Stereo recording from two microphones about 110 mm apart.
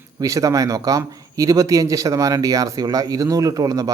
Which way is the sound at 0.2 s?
30° right (ahead or behind).